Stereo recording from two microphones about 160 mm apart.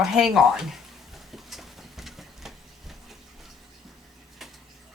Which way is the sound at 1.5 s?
Centre (ahead or behind).